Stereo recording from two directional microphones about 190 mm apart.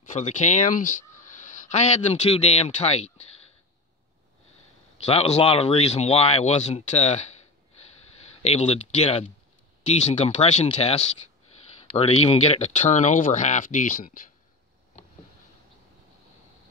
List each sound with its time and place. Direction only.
0.0 s speech: 40° left (ahead or behind)
5.0 s speech: 35° left (ahead or behind)
8.4 s speech: 35° left (ahead or behind)